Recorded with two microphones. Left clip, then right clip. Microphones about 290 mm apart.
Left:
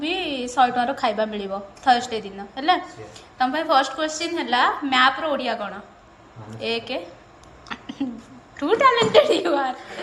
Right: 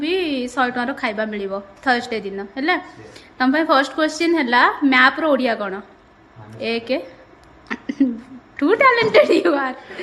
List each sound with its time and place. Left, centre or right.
0.0 s a woman's voice: centre
7.7 s a sound: centre
8.5 s a woman's voice: centre